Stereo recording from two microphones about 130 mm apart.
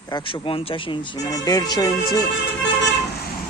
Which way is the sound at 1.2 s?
30° left (ahead or behind).